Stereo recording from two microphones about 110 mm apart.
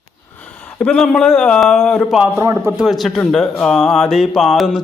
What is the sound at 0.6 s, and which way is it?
Speech, 10° left (ahead or behind).